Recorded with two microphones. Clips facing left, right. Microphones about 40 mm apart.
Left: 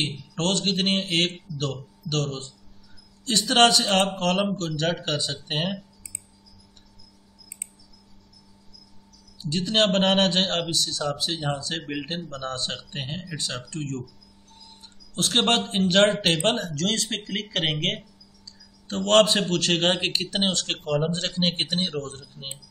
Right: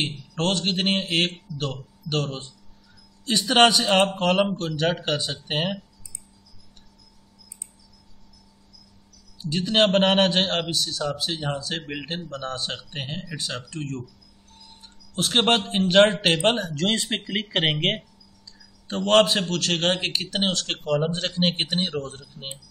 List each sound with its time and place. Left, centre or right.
0.0 s a man's voice: centre
9.4 s a man's voice: centre
15.1 s a man's voice: centre